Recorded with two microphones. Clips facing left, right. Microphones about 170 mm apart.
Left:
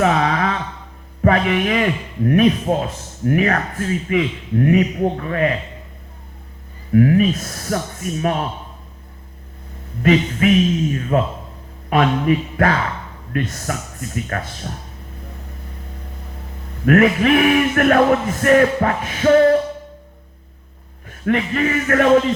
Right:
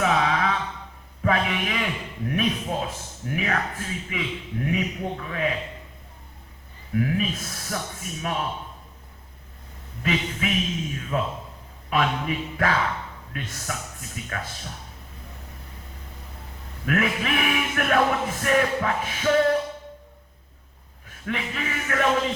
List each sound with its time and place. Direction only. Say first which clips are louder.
0.0 s a sound: left 5 dB; 55° left (ahead or behind)
1.2 s a man's voice: left 8 dB; 55° left (ahead or behind)
6.9 s a man's voice: left 11 dB; 60° left (ahead or behind)
10.0 s a man's voice: left 11 dB; 55° left (ahead or behind)
16.8 s a man's voice: left 11 dB; 55° left (ahead or behind)
21.2 s a man's voice: left 11 dB; 55° left (ahead or behind)